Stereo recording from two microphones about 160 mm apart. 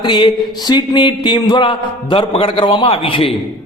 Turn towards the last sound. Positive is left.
turn(degrees=35)  # may be behind; listen again after turning